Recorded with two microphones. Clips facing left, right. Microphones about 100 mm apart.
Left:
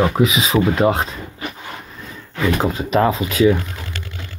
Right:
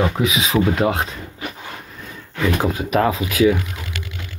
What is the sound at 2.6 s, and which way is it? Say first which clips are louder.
Speech: left 2 dB; 5° right (ahead or behind).